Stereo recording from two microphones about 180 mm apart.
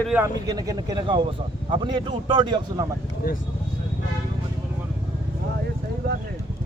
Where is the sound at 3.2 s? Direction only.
55° left (ahead or behind).